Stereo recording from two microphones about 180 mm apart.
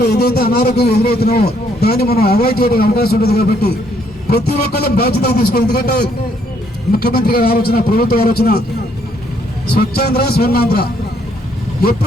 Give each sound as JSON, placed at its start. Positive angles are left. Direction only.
{"t": 0.0, "sound": "a man's voice", "side_deg": 60}
{"t": 9.7, "sound": "a man's voice", "side_deg": 60}